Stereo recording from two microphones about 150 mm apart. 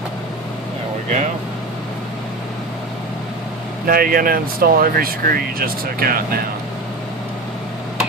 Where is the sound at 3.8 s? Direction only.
75° right (ahead or behind).